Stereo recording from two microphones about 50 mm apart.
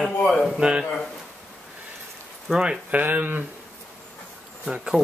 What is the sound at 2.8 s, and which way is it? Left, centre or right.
Speech, right.